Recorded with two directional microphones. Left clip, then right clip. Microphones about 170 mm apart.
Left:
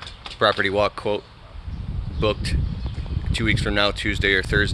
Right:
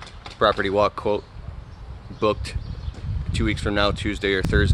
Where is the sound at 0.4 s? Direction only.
Centre (ahead or behind).